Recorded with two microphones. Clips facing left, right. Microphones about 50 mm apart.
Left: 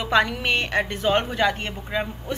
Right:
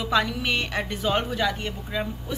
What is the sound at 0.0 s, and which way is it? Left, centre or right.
A woman's voice, left.